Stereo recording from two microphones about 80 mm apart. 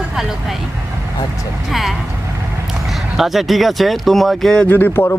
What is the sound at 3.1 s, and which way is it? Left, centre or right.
Speech, centre.